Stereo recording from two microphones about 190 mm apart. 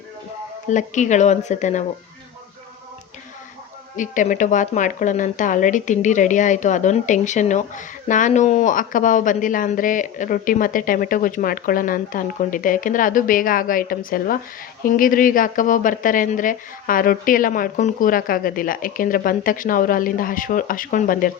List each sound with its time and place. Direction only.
0.7 s speech: 40° left (ahead or behind)
3.9 s speech: 40° left (ahead or behind)